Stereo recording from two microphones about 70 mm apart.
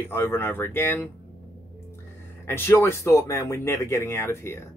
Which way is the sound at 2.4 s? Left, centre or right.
Left.